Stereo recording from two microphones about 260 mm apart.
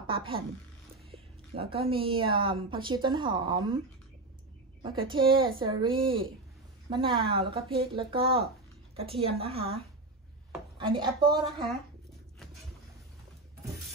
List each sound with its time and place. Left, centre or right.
0.0 s a woman's voice: centre
4.8 s a woman's voice: centre
10.8 s a woman's voice: centre